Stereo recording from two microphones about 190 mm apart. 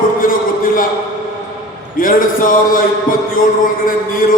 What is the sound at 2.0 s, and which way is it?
Speech, 45° left (ahead or behind).